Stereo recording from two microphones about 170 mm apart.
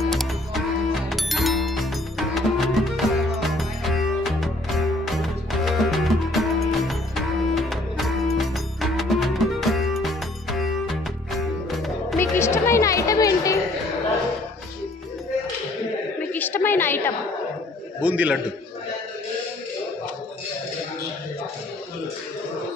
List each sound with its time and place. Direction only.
0.0 s music: centre (ahead or behind)
12.2 s music: 15° left (ahead or behind)
16.3 s a sound: 10° left (ahead or behind)
18.0 s a man's voice: 10° right (ahead or behind)